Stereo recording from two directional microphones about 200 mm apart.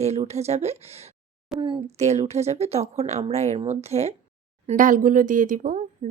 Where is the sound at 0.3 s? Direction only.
30° right (ahead or behind).